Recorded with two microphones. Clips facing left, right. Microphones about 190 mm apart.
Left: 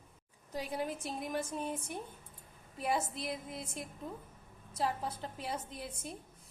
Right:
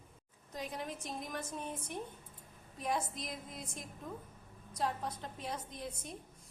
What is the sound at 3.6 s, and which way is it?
Speech, 30° left (ahead or behind).